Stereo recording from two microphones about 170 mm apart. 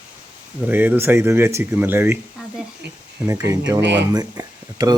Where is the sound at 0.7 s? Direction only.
10° right (ahead or behind).